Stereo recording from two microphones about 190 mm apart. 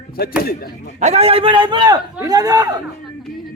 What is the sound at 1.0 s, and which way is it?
A man's voice, 35° right (ahead or behind).